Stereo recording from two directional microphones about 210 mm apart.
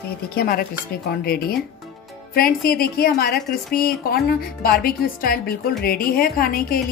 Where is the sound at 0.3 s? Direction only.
45° left (ahead or behind).